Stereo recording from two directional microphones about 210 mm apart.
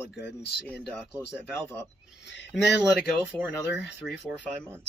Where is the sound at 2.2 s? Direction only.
55° left (ahead or behind).